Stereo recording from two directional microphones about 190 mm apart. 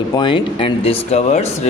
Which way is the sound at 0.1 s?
25° left (ahead or behind).